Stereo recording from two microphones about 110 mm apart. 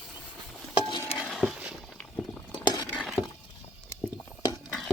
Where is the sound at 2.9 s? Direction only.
5° right (ahead or behind).